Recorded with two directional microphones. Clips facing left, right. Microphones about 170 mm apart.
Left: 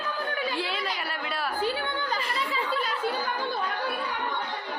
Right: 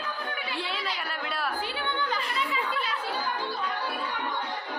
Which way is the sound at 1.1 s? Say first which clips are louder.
Left 1 dB; centre (ahead or behind).